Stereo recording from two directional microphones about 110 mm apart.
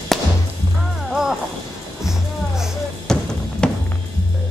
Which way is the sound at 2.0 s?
5° right (ahead or behind).